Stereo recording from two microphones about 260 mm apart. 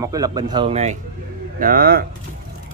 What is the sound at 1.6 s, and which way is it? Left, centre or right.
Speech, right.